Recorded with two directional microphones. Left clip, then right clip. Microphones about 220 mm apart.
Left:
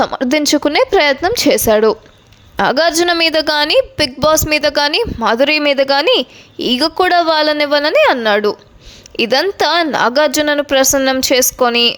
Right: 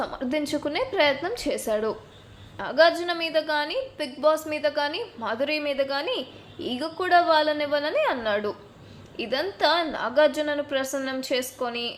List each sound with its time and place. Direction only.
0.0 s a woman's voice: 45° left (ahead or behind)